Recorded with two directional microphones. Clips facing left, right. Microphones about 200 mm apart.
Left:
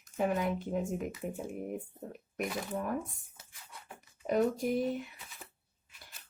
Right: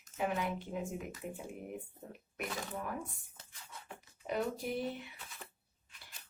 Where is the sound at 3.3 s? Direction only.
10° left (ahead or behind).